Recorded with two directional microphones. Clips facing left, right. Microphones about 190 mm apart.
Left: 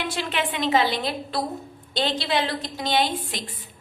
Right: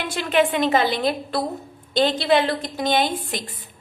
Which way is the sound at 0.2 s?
50° right (ahead or behind).